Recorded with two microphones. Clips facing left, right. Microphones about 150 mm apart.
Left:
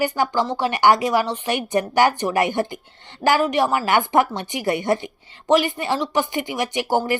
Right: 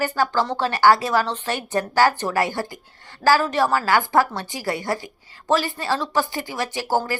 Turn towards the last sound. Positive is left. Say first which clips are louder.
# left 2 dB
turn(degrees=20)  # may be behind; listen again after turning